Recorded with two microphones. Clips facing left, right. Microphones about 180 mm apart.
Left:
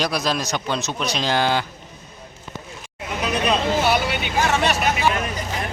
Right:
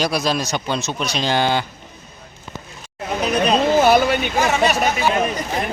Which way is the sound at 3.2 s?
40° right (ahead or behind).